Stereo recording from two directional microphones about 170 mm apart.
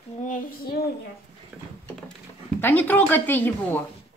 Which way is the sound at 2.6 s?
10° left (ahead or behind).